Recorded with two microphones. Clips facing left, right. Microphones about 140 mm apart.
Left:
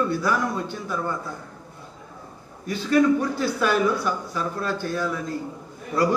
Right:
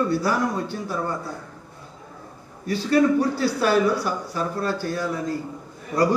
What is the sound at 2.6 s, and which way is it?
Speech, 35° right (ahead or behind).